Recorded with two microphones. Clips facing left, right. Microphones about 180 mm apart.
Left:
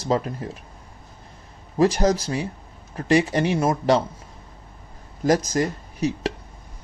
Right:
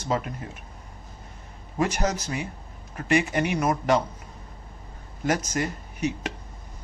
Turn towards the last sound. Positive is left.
turn(degrees=35)  # may be behind; listen again after turning